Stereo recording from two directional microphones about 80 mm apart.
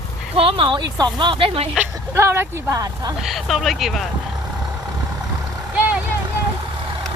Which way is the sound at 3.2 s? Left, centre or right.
Centre.